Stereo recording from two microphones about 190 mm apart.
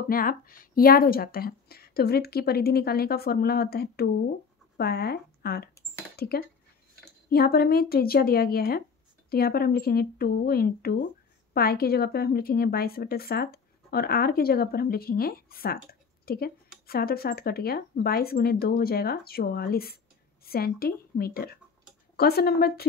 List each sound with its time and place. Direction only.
0.1 s a woman's voice: 50° left (ahead or behind)